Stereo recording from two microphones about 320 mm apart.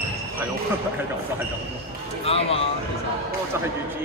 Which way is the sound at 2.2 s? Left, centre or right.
Centre.